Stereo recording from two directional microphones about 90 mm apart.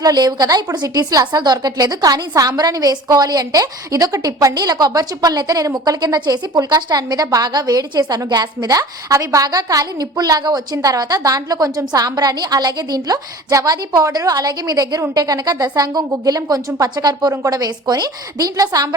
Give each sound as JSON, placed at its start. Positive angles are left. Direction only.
{"t": 0.0, "sound": "a woman's voice", "side_deg": -45}